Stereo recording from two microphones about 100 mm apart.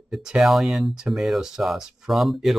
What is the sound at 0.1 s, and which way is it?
Speech, 5° right (ahead or behind).